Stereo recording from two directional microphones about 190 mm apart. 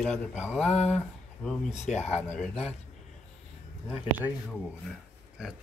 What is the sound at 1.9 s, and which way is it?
Speech, 5° right (ahead or behind).